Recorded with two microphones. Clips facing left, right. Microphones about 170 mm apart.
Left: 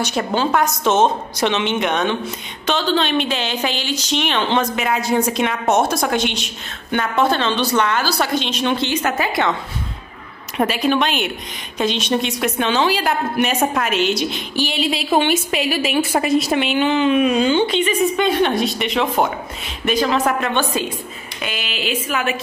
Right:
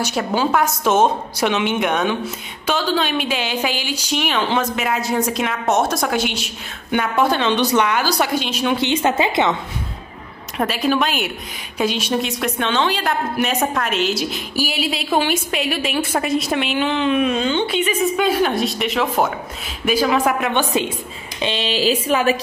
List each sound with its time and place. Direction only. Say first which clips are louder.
0.0 s speech: even; 5° right (ahead or behind)
8.9 s a woman's voice: right 2 dB; 25° right (ahead or behind)
10.6 s a woman's voice: left 1 dB; centre (ahead or behind)
17.6 s a woman's voice: left 1 dB; 5° right (ahead or behind); by 22.4 s 35° right (ahead or behind)